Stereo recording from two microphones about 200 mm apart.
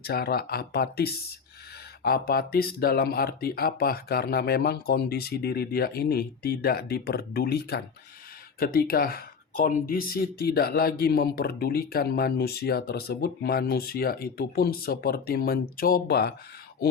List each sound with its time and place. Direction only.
0.0 s speech: 50° left (ahead or behind)